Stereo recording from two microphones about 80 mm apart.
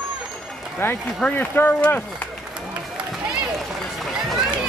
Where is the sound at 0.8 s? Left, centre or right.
Left.